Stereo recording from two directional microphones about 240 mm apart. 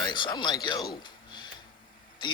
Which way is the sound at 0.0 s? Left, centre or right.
Centre.